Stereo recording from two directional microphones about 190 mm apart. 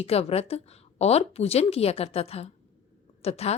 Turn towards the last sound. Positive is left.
turn(degrees=30)  # may be behind; listen again after turning